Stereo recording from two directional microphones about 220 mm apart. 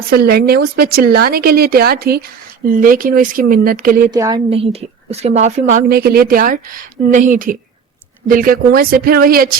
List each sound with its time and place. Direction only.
0.2 s a woman's voice: 45° right (ahead or behind)
4.1 s a woman's voice: 20° right (ahead or behind); by 9.5 s 40° right (ahead or behind)